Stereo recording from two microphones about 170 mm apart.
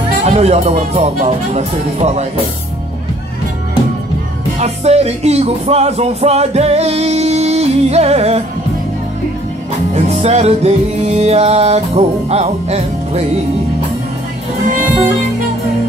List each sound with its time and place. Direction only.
0.2 s music: 40° right (ahead or behind)
4.6 s music: 40° right (ahead or behind)
9.9 s music: 40° right (ahead or behind)